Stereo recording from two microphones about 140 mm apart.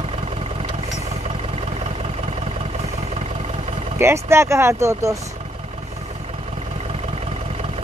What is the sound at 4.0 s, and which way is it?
Speech, 20° right (ahead or behind).